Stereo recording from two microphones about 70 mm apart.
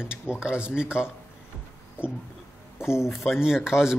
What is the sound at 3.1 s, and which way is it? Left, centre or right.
Speech, centre.